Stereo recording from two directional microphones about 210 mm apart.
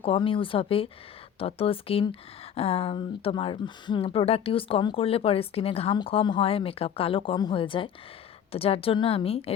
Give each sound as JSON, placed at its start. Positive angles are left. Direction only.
{"t": 0.0, "sound": "speech", "side_deg": 25}